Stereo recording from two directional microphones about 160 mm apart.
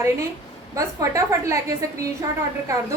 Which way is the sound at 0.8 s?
20° right (ahead or behind).